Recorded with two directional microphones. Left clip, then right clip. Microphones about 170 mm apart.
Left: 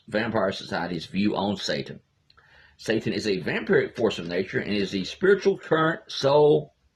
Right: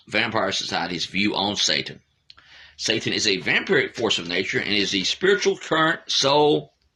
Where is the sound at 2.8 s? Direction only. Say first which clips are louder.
Right 4 dB; 20° right (ahead or behind).